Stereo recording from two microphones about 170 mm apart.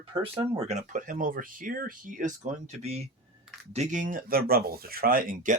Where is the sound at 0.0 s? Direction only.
30° right (ahead or behind).